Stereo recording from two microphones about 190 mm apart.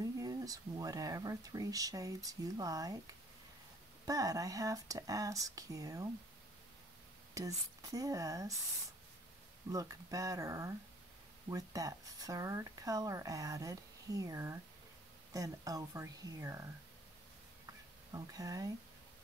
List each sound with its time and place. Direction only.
0.0 s speech: 20° right (ahead or behind)
4.0 s speech: 20° right (ahead or behind)
7.3 s speech: 15° right (ahead or behind)
9.7 s speech: 20° right (ahead or behind)
18.1 s speech: 20° right (ahead or behind)